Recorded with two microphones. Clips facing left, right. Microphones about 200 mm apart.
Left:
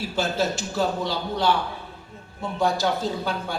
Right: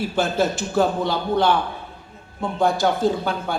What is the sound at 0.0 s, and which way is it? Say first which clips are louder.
Speech: right 4 dB; 55° right (ahead or behind).